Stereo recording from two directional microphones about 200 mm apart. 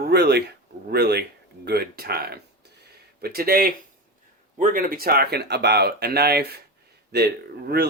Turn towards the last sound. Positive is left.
turn(degrees=-55)  # may be behind; listen again after turning